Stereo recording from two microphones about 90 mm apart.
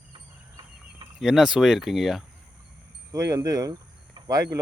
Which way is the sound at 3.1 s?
35° right (ahead or behind).